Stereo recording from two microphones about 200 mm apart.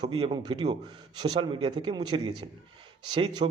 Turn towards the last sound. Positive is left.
turn(degrees=-25)  # may be behind; listen again after turning